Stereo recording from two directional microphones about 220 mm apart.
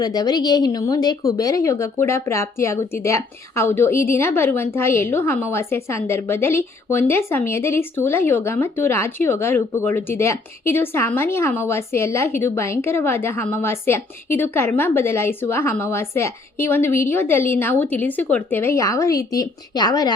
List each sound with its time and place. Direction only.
0.0 s a woman's voice: 15° left (ahead or behind)